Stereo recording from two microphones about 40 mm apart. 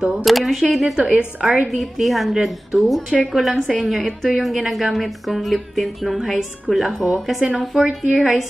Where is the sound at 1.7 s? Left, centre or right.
Centre.